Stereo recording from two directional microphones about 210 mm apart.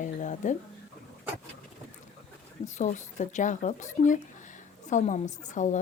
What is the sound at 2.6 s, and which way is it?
Speech, 35° left (ahead or behind).